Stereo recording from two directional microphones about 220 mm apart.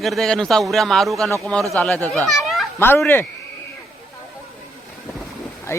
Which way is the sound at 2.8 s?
10° left (ahead or behind).